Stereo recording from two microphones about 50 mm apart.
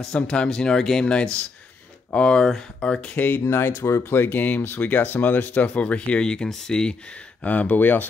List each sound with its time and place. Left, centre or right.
0.0 s speech: centre
1.0 s speech: centre
3.2 s speech: left; by 7.0 s centre
7.4 s speech: left